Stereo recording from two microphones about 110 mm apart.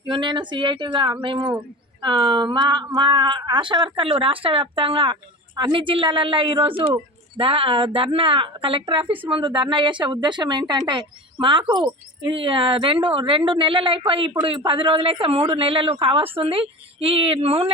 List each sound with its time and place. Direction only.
0.0 s a woman's voice: 45° right (ahead or behind)